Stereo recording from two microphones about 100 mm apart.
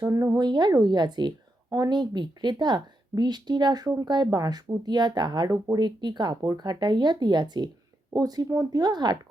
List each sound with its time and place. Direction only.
0.0 s speech: 35° right (ahead or behind)
0.4 s a woman's voice: 45° right (ahead or behind)